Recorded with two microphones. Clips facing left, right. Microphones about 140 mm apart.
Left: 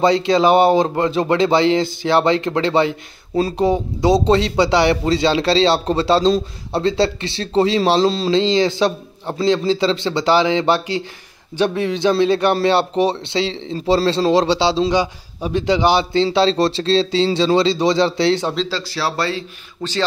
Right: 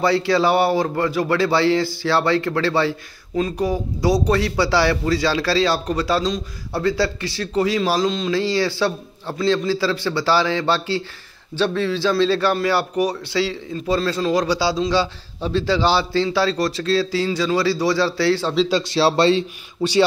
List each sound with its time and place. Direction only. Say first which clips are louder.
0.0 s a man's voice: left 3 dB; 20° left (ahead or behind)
3.3 s a man's voice: left 4 dB; 30° left (ahead or behind)
8.4 s a man's voice: left 5 dB; 20° left (ahead or behind)
18.7 s speech: right 5 dB; 20° right (ahead or behind)
19.8 s a man's voice: right 5 dB; 10° right (ahead or behind)